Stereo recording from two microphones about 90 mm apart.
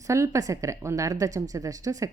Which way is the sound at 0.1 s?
35° right (ahead or behind).